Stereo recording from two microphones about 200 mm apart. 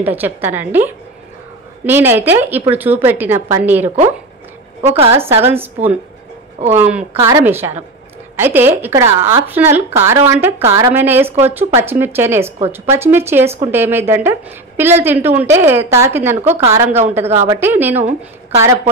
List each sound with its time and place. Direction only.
0.0 s speech: 10° right (ahead or behind)
4.8 s a woman's voice: 30° right (ahead or behind)
5.1 s speech: 10° right (ahead or behind)
16.4 s a woman's voice: 30° right (ahead or behind)
16.7 s speech: 10° right (ahead or behind)